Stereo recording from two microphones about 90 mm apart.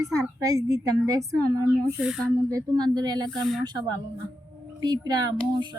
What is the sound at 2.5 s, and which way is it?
Speech, 45° right (ahead or behind).